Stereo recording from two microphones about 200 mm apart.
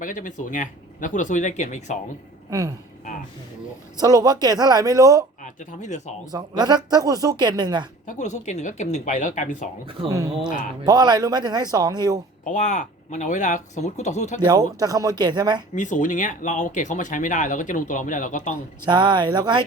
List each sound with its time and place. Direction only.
0.0 s speech: 40° left (ahead or behind)
2.5 s speech: 15° right (ahead or behind)
4.0 s speech: 20° right (ahead or behind)
5.4 s speech: 40° left (ahead or behind)
6.3 s speech: 20° right (ahead or behind)
8.0 s speech: 35° left (ahead or behind)
10.1 s speech: 15° right (ahead or behind)
12.5 s speech: 40° left (ahead or behind)
14.4 s speech: 15° right (ahead or behind)
15.7 s speech: 40° left (ahead or behind)
18.9 s speech: 20° right (ahead or behind)